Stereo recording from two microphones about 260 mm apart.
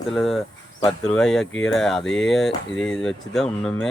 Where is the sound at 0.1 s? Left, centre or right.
Centre.